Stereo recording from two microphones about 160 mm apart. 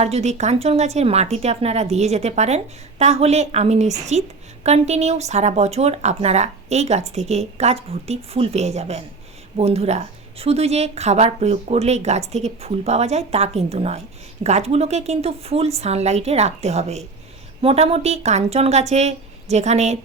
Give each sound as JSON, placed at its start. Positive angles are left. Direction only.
{"t": 0.0, "sound": "speech", "side_deg": -45}